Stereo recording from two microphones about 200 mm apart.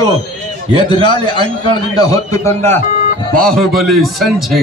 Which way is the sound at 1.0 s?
20° left (ahead or behind).